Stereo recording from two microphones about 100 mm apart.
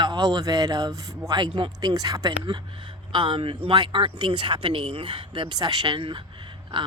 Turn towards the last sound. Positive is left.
turn(degrees=-50)  # may be behind; listen again after turning